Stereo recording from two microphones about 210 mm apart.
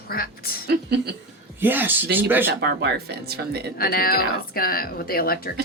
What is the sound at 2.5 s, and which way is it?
Speech, 50° right (ahead or behind).